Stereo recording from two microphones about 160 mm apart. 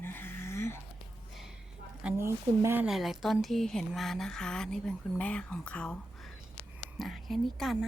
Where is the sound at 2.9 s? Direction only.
Centre (ahead or behind).